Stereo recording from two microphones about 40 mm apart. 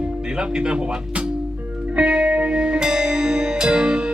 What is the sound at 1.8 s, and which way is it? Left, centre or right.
Music, right.